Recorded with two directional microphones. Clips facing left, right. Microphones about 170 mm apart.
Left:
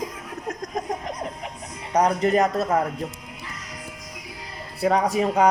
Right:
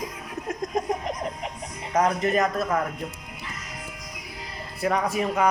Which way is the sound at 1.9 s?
35° left (ahead or behind).